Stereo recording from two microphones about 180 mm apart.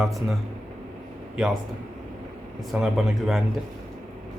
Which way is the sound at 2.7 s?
Centre (ahead or behind).